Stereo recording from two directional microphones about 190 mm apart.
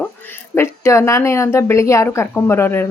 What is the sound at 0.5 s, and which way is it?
A woman's voice, 15° left (ahead or behind).